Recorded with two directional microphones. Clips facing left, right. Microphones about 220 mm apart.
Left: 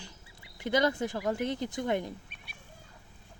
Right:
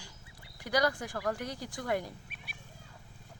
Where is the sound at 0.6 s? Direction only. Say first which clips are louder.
Left 3 dB; 25° left (ahead or behind).